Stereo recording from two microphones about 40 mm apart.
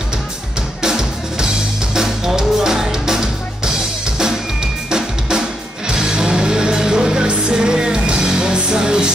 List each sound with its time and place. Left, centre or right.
0.8 s music: centre
5.9 s music: centre